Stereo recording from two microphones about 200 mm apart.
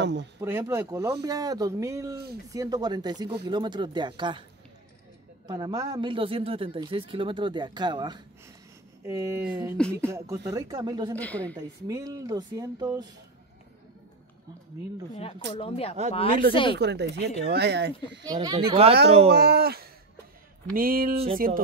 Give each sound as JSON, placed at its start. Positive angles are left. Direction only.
{"t": 0.0, "sound": "speech", "side_deg": -60}
{"t": 0.4, "sound": "speech", "side_deg": -15}
{"t": 5.5, "sound": "speech", "side_deg": -20}
{"t": 11.1, "sound": "a woman's voice", "side_deg": 5}
{"t": 11.5, "sound": "speech", "side_deg": -15}
{"t": 15.5, "sound": "speech", "side_deg": 30}
{"t": 16.7, "sound": "speech", "side_deg": -60}
{"t": 18.2, "sound": "speech", "side_deg": -20}
{"t": 19.0, "sound": "speech", "side_deg": -30}
{"t": 19.3, "sound": "speech", "side_deg": -50}